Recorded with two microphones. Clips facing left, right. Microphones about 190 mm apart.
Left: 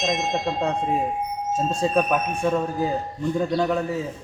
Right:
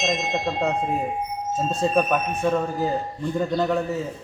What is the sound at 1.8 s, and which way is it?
Speech, centre (ahead or behind).